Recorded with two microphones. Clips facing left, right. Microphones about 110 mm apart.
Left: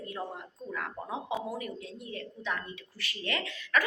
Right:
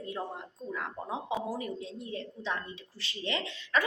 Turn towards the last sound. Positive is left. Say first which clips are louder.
# even
turn(degrees=-25)  # may be behind; listen again after turning